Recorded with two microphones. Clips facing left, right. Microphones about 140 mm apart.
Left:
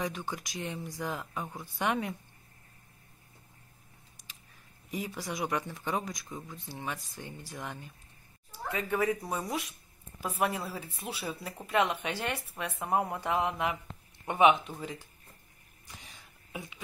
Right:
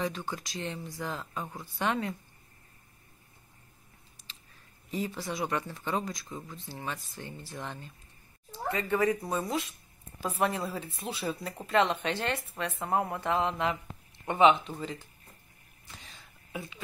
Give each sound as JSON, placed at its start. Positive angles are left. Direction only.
{"t": 0.0, "sound": "speech", "side_deg": 15}
{"t": 4.3, "sound": "a sound", "side_deg": 15}
{"t": 4.9, "sound": "speech", "side_deg": 15}
{"t": 6.2, "sound": "speech", "side_deg": 0}
{"t": 6.7, "sound": "speech", "side_deg": 15}
{"t": 15.9, "sound": "a sound", "side_deg": 15}